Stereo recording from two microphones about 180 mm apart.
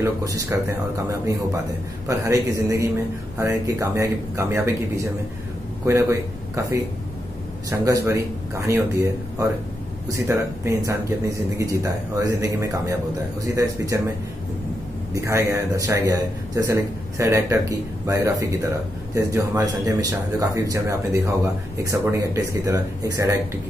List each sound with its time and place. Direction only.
0.0 s a man's voice: 20° right (ahead or behind)
15.1 s a man's voice: 15° right (ahead or behind)